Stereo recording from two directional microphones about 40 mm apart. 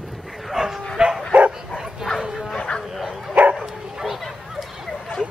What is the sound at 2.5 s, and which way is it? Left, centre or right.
Bow-wow, left.